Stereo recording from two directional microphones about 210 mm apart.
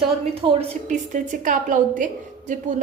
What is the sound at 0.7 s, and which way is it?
A woman's voice, 35° right (ahead or behind).